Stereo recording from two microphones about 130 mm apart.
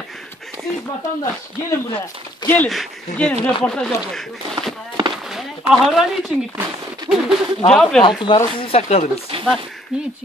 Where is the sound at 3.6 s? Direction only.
5° left (ahead or behind).